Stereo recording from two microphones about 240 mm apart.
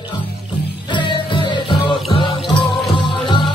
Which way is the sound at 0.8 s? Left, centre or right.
Centre.